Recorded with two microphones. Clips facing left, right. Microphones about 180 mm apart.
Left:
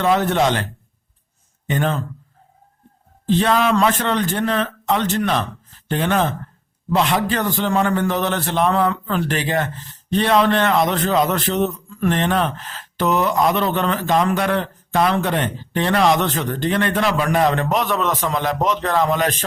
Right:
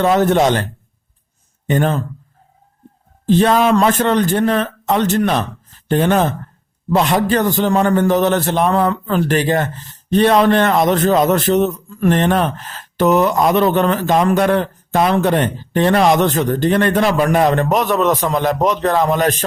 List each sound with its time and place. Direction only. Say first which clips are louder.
0.0 s speech: right 4 dB; 40° right (ahead or behind)
1.6 s speech: right 5 dB; 45° right (ahead or behind)
3.2 s a man's voice: right 4 dB; 45° right (ahead or behind)